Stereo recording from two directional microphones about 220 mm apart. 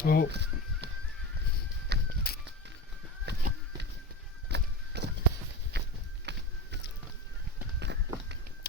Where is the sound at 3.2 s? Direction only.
45° right (ahead or behind).